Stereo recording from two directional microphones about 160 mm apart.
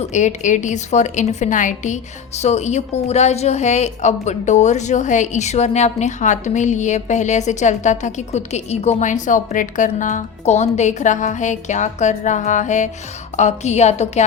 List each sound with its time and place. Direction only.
0.0 s a woman's voice: 45° left (ahead or behind)